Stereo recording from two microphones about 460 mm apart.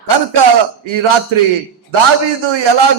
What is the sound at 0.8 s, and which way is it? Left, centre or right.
Speech, right.